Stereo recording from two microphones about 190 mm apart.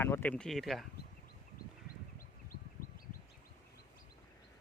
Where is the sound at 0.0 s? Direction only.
10° left (ahead or behind).